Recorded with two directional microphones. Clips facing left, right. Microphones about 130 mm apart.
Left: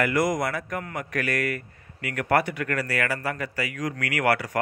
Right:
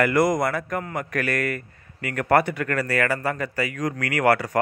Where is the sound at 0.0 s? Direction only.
50° right (ahead or behind).